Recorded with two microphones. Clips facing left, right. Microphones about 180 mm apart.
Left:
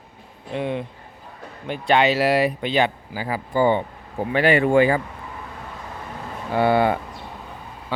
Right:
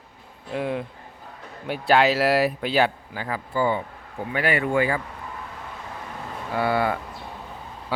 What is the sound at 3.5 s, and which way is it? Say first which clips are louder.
Speech: left 5 dB; 30° left (ahead or behind).